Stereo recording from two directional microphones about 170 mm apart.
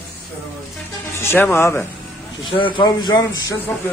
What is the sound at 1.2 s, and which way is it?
Speech, 10° left (ahead or behind).